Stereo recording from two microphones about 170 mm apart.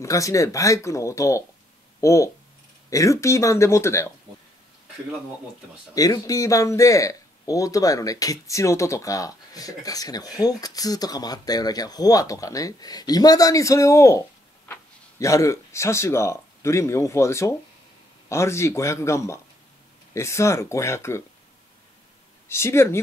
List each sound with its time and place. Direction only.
0.0 s speech: 20° left (ahead or behind)
5.9 s speech: 20° left (ahead or behind)
22.5 s speech: 15° left (ahead or behind)